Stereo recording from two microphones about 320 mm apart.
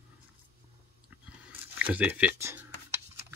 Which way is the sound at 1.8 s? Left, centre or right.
Centre.